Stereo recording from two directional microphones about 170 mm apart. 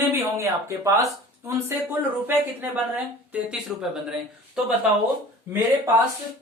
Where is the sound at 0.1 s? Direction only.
15° right (ahead or behind).